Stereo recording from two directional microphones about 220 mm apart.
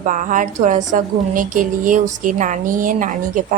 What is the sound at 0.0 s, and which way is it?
A woman's voice, 35° right (ahead or behind).